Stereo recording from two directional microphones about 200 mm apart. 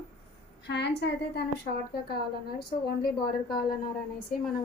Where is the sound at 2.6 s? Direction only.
50° left (ahead or behind).